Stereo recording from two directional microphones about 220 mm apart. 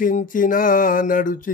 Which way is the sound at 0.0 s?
35° left (ahead or behind).